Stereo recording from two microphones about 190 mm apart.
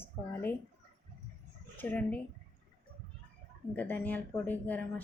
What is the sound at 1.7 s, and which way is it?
Speech, 10° left (ahead or behind).